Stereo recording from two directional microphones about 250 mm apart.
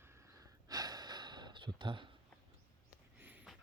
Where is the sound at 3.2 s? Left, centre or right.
Centre.